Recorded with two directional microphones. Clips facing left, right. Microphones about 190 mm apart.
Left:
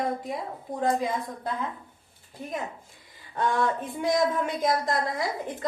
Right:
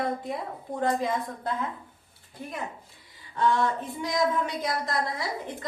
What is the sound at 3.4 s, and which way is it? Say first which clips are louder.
A woman's voice: right 1 dB; 50° left (ahead or behind).